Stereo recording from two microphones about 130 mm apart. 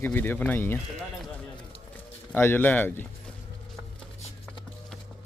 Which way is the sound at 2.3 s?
15° left (ahead or behind).